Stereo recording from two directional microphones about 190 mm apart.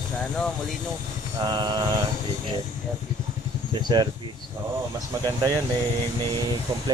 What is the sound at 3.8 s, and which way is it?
Speech, 25° right (ahead or behind).